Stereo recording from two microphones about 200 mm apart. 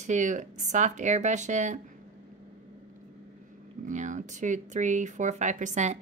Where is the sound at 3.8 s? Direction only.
40° right (ahead or behind).